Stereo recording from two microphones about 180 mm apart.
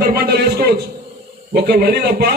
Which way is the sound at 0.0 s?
60° right (ahead or behind).